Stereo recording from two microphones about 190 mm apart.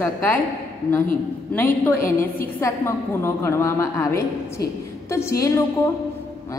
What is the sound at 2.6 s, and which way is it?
A woman's voice, 15° left (ahead or behind).